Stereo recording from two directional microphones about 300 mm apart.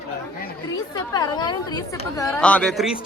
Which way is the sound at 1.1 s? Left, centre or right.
Centre.